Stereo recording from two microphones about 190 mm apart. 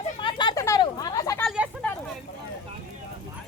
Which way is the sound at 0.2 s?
25° left (ahead or behind).